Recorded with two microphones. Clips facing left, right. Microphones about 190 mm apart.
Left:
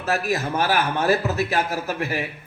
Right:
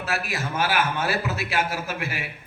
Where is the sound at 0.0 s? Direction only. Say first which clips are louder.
Left 5 dB; 40° left (ahead or behind).